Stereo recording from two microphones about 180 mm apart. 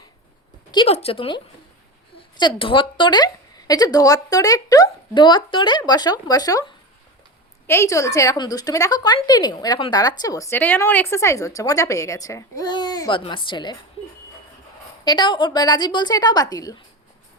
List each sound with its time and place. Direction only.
0.7 s speech: 30° left (ahead or behind)
2.4 s a woman's voice: 30° left (ahead or behind)
15.0 s a woman's voice: 25° left (ahead or behind)